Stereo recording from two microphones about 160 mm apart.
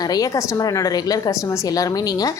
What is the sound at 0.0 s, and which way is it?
A woman's voice, 25° left (ahead or behind).